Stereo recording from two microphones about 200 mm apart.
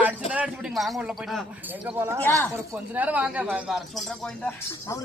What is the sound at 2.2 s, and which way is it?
Speech, 10° left (ahead or behind).